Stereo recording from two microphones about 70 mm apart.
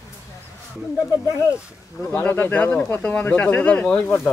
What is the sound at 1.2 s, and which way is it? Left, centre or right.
Speech, left.